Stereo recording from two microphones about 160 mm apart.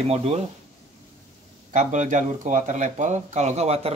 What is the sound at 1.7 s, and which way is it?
Speech, 50° right (ahead or behind).